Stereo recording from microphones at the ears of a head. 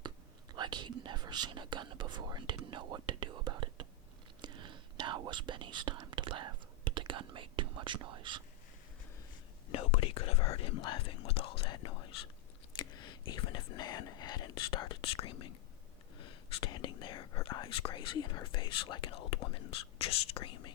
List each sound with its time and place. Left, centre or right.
0.5 s speech: right
9.6 s speech: left
12.7 s whispering: left
16.1 s speech: left